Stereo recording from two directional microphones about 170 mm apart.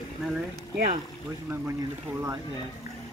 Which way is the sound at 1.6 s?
15° right (ahead or behind).